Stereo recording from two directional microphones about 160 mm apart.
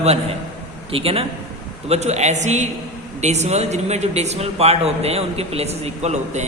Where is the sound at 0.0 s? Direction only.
40° right (ahead or behind).